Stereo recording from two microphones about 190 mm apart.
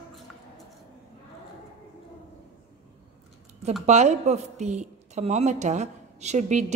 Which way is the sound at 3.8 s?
35° right (ahead or behind).